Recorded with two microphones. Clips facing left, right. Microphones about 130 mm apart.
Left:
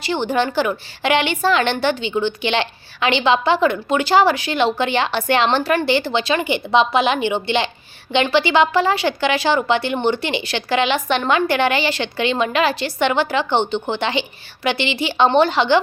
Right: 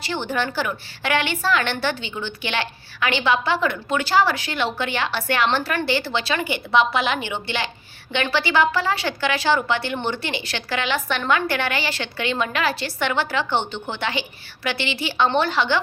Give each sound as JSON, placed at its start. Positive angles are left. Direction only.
{"t": 0.0, "sound": "a woman's voice", "side_deg": 15}